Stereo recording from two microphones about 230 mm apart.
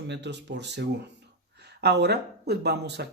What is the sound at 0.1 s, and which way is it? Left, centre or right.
Speech, right.